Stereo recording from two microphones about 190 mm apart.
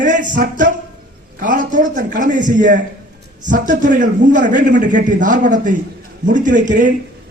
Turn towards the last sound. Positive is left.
turn(degrees=-45)  # may be behind; listen again after turning